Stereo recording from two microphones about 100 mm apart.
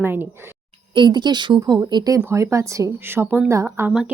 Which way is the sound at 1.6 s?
35° right (ahead or behind).